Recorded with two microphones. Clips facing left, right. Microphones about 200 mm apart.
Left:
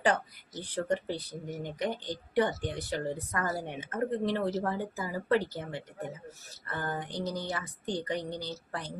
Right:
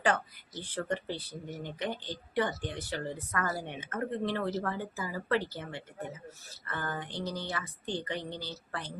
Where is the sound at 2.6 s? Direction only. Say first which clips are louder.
Left 3 dB; 40° left (ahead or behind).